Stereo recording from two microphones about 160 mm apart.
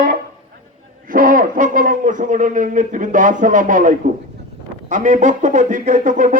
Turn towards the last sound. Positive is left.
turn(degrees=-55)  # may be behind; listen again after turning